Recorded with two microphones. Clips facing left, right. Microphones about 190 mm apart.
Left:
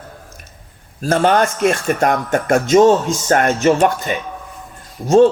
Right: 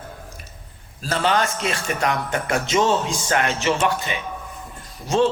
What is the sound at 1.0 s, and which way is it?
Speech, 50° left (ahead or behind).